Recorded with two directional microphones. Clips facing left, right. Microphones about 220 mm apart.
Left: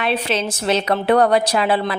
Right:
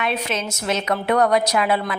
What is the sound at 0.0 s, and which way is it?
A woman's voice, 30° left (ahead or behind).